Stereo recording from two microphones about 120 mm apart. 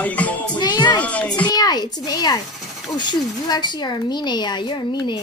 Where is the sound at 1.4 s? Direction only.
35° left (ahead or behind).